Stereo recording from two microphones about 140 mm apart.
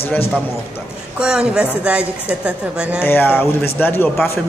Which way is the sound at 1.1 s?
5° right (ahead or behind).